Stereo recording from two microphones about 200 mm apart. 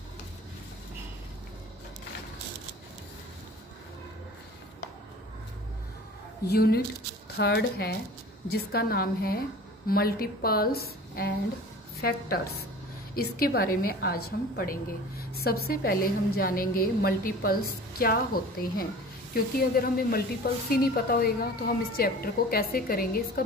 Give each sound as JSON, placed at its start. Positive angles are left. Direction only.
{"t": 6.4, "sound": "a woman's voice", "side_deg": 50}